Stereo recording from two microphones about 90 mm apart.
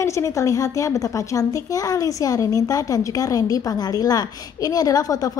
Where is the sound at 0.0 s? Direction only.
35° left (ahead or behind).